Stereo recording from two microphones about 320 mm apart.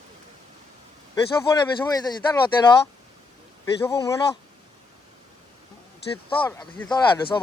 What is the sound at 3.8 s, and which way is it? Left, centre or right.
Speech, centre.